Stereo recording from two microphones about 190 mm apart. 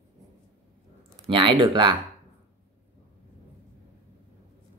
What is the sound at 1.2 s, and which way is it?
Speech, 25° right (ahead or behind).